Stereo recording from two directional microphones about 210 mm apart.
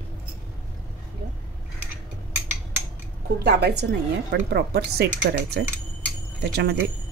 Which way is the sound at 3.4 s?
50° right (ahead or behind).